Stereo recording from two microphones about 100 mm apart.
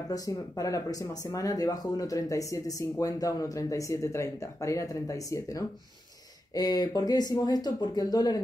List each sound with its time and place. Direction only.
0.6 s speech: 35° left (ahead or behind)